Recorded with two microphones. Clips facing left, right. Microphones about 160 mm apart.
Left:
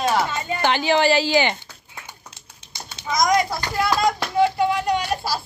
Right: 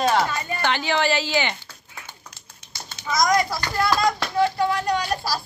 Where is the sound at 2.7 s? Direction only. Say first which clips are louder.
Left 1 dB; 20° left (ahead or behind).